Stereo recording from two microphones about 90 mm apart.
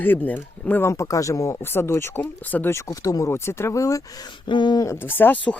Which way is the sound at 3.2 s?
30° left (ahead or behind).